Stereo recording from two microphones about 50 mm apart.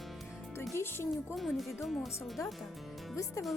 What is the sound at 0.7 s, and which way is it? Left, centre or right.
Speech, left.